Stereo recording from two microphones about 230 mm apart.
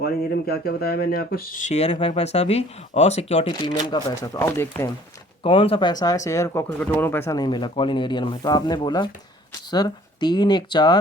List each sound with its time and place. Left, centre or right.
0.0 s speech: left; by 4.9 s centre
5.4 s speech: left